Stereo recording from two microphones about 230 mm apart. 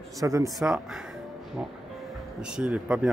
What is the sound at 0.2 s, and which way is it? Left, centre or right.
Speech, centre.